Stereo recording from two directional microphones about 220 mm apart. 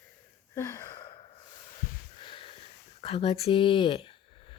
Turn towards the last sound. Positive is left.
turn(degrees=25)  # may be behind; listen again after turning